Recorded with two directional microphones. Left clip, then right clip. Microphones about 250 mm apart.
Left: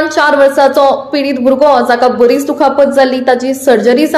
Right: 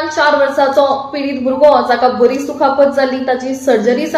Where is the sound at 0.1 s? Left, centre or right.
Left.